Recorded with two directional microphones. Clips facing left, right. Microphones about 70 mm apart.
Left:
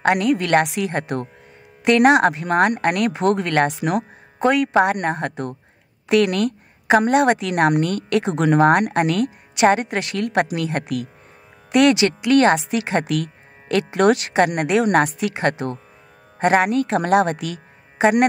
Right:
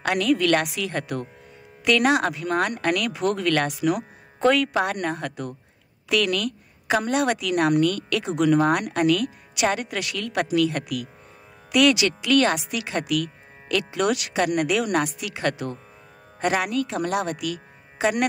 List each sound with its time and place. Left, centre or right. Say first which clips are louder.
0.0 s a woman's voice: left 3 dB; left